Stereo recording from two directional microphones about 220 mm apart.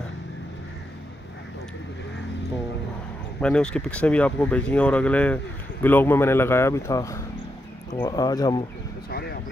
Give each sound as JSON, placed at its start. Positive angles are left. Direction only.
{"t": 3.3, "sound": "speech", "side_deg": 5}
{"t": 9.1, "sound": "speech", "side_deg": 45}